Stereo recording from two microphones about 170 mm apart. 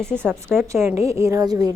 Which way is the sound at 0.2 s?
15° right (ahead or behind).